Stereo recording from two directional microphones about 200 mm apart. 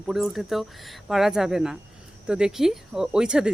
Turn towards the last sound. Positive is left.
turn(degrees=-5)  # may be behind; listen again after turning